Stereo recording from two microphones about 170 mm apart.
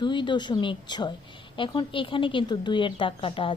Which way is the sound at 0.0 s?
25° left (ahead or behind).